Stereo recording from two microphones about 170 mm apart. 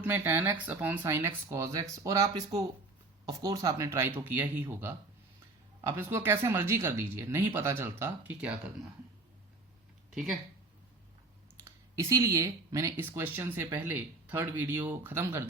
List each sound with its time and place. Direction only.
0.0 s speech: 10° right (ahead or behind)
10.1 s speech: centre (ahead or behind)
11.6 s speech: 20° right (ahead or behind)